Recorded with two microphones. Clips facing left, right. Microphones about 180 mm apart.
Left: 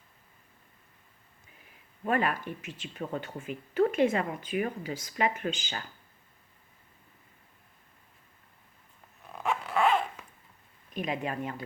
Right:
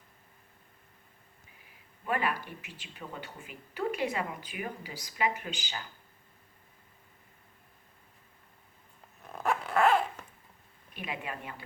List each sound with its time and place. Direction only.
2.0 s speech: 45° left (ahead or behind)
9.3 s dog: centre (ahead or behind)
10.9 s speech: 40° left (ahead or behind)